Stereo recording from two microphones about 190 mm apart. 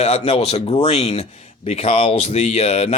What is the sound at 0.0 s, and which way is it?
Speech, 35° left (ahead or behind).